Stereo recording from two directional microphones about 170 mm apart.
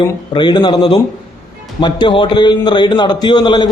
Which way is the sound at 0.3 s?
25° left (ahead or behind).